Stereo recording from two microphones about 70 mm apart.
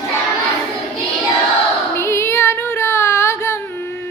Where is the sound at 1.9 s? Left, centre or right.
Left.